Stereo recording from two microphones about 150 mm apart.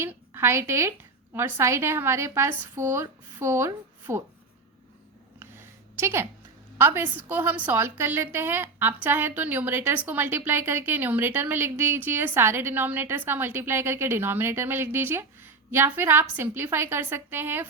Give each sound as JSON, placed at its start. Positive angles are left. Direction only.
{"t": 0.0, "sound": "a woman's voice", "side_deg": -15}
{"t": 6.0, "sound": "a woman's voice", "side_deg": -15}